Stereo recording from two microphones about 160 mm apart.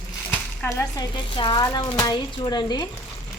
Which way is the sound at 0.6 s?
10° left (ahead or behind).